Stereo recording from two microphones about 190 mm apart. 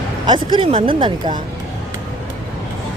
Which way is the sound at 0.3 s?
25° right (ahead or behind).